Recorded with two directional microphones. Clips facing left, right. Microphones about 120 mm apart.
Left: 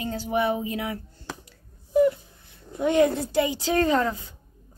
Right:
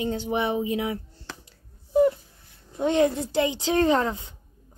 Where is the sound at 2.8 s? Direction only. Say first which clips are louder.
Left 1 dB; 25° right (ahead or behind).